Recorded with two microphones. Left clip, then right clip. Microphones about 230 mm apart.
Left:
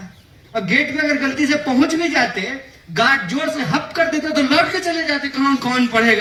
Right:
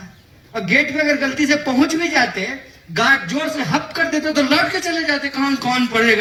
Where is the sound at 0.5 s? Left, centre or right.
Right.